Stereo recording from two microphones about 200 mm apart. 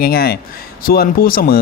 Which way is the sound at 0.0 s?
50° left (ahead or behind).